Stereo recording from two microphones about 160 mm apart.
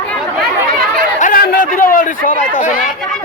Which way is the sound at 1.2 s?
60° left (ahead or behind).